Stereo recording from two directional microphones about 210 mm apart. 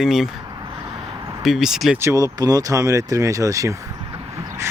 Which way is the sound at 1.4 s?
Centre (ahead or behind).